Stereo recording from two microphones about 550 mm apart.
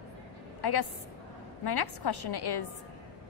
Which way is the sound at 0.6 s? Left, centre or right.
Left.